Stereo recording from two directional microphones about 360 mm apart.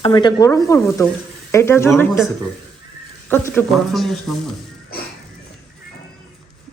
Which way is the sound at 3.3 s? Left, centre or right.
Centre.